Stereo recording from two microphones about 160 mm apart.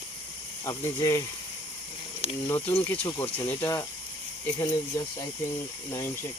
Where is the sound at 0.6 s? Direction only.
20° left (ahead or behind).